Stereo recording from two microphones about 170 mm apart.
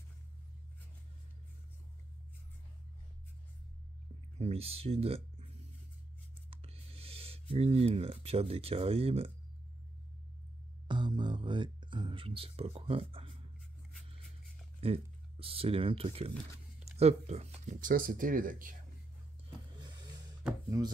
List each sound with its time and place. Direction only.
4.4 s speech: 35° right (ahead or behind)
6.5 s speech: 35° right (ahead or behind)
10.9 s music: 25° right (ahead or behind)
14.8 s speech: 35° right (ahead or behind); by 18.8 s 55° right (ahead or behind)